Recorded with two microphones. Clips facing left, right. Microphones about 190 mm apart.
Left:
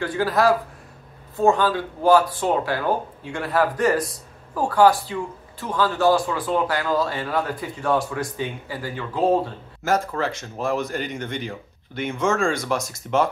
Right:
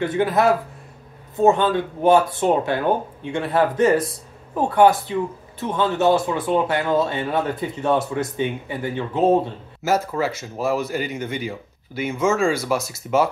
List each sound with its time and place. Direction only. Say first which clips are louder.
0.0 s speech: right 2 dB; 20° right (ahead or behind)
9.8 s speech: right 2 dB; 5° right (ahead or behind)